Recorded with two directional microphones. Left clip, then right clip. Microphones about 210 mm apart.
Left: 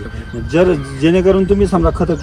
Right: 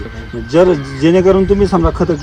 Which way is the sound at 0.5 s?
15° right (ahead or behind).